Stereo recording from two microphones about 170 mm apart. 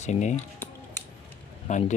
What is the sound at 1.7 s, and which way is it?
Speech, 45° left (ahead or behind).